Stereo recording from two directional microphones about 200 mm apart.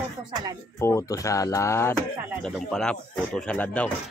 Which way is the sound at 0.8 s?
15° left (ahead or behind).